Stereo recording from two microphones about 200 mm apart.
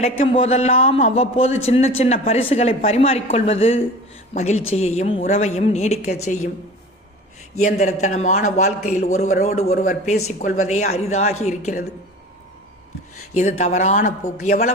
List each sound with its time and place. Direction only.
0.0 s a man's voice: 30° left (ahead or behind)
7.6 s a man's voice: 35° left (ahead or behind)
13.3 s a man's voice: 35° left (ahead or behind)